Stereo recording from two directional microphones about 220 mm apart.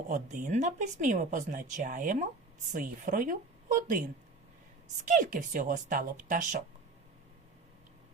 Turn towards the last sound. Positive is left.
turn(degrees=-35)  # may be behind; listen again after turning